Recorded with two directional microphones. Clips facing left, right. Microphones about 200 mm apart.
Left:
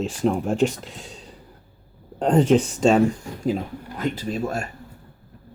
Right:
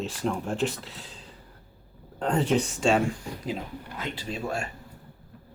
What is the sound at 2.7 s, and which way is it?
Speech, 40° left (ahead or behind).